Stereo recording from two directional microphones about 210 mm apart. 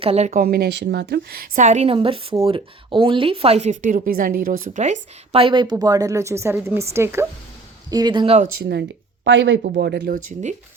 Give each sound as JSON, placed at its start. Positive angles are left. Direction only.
{"t": 0.0, "sound": "speech", "side_deg": -30}
{"t": 0.4, "sound": "a woman's voice", "side_deg": -50}
{"t": 8.7, "sound": "a woman's voice", "side_deg": -60}